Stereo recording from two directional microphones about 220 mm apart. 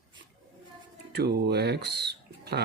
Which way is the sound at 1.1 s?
50° right (ahead or behind).